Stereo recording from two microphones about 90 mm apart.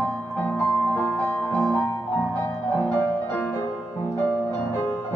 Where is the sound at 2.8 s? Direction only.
15° left (ahead or behind).